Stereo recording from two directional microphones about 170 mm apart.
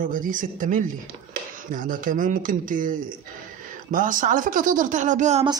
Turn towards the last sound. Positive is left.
turn(degrees=-45)  # may be behind; listen again after turning